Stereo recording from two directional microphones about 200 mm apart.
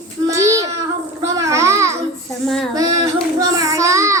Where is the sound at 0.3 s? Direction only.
15° right (ahead or behind).